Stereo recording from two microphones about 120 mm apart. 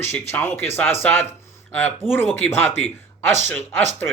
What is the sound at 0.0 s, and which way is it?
Speech, 20° left (ahead or behind).